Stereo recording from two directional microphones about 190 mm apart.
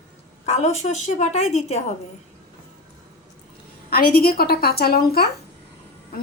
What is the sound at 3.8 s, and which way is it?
A woman's voice, 55° left (ahead or behind).